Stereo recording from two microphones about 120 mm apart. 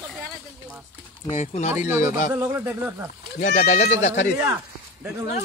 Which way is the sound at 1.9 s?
20° right (ahead or behind).